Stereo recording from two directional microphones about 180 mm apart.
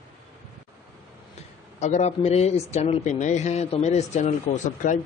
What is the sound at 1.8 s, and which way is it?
Speech, 40° left (ahead or behind).